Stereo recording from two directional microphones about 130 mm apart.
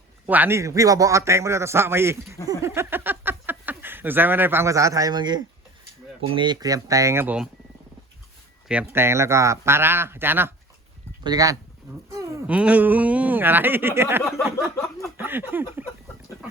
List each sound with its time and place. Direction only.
0.3 s a man's voice: 15° right (ahead or behind)
8.6 s speech: 10° right (ahead or behind)
11.2 s a man's voice: 30° right (ahead or behind)
12.5 s speech: 10° right (ahead or behind)
14.4 s a sound: centre (ahead or behind)
15.2 s speech: 15° right (ahead or behind)